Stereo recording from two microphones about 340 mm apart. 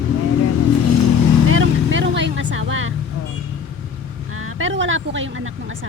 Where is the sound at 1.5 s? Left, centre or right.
Right.